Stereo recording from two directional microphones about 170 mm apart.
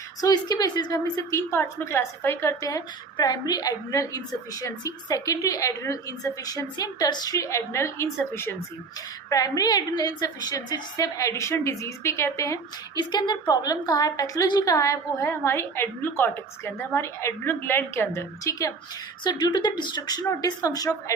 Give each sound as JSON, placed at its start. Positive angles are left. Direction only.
{"t": 0.2, "sound": "a woman's voice", "side_deg": 25}